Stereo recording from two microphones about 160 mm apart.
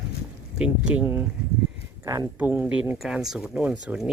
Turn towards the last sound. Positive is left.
turn(degrees=-5)  # may be behind; listen again after turning